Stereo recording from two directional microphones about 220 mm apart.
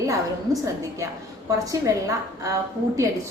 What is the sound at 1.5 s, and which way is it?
A woman's voice, 15° right (ahead or behind).